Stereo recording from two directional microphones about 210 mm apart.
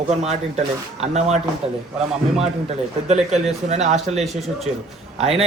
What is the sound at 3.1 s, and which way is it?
Speech, 30° right (ahead or behind).